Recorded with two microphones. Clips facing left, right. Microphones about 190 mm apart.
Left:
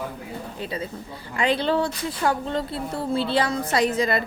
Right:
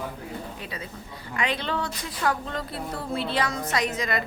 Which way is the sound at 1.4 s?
30° left (ahead or behind).